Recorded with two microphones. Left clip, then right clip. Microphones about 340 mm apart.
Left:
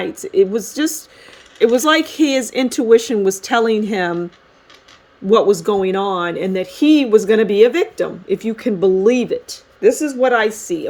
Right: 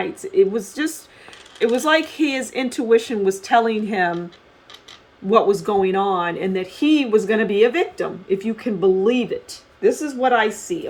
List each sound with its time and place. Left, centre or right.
0.0 s speech: left
5.3 s speech: left